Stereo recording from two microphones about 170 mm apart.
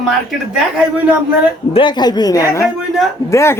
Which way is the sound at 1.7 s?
25° left (ahead or behind).